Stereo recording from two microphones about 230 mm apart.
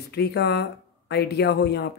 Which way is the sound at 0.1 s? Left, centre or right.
Left.